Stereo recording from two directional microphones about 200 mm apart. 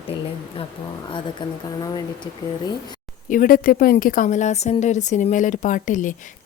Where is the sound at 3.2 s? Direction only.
45° left (ahead or behind).